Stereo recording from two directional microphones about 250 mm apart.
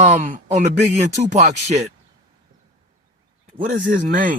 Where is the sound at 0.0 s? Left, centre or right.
Right.